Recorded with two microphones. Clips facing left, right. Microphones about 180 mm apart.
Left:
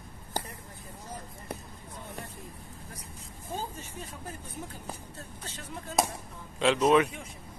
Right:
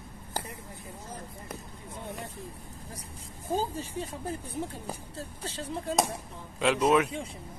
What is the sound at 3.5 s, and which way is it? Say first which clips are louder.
Speech: right 7 dB; 35° right (ahead or behind).